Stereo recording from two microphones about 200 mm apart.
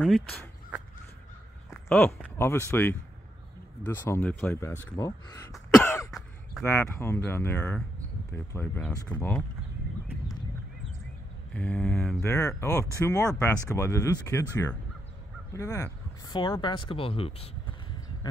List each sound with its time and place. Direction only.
1.7 s a sound: 10° left (ahead or behind)
2.3 s speech: 10° left (ahead or behind)
5.5 s cough: 5° left (ahead or behind)
6.6 s speech: 15° left (ahead or behind)
11.5 s speech: 5° left (ahead or behind); by 17.5 s 25° left (ahead or behind)